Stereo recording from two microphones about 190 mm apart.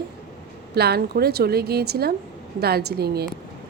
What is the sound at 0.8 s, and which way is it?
A woman's voice, 55° right (ahead or behind).